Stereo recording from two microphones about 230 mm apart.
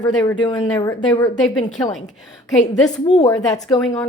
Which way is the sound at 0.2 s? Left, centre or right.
Centre.